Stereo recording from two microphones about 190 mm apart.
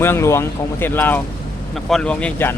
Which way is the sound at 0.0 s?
15° left (ahead or behind).